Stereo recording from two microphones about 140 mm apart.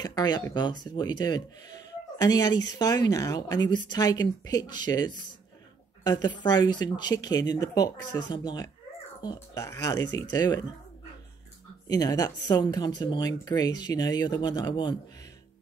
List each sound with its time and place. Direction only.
0.0 s speech: 30° left (ahead or behind)
11.9 s speech: 25° left (ahead or behind)